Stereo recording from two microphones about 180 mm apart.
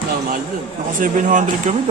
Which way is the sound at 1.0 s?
45° right (ahead or behind).